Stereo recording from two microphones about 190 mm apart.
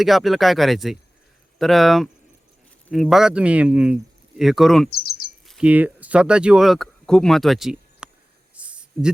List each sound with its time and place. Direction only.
0.0 s speech: centre (ahead or behind)
4.9 s speech: 55° left (ahead or behind)
5.5 s speech: 5° right (ahead or behind)
8.5 s a sound: 5° right (ahead or behind)